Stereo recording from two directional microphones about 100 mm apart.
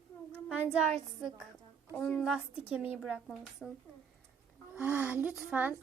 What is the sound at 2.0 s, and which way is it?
Speech, 10° left (ahead or behind).